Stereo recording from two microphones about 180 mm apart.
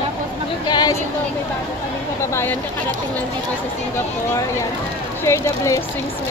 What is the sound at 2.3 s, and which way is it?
Speech, 15° left (ahead or behind).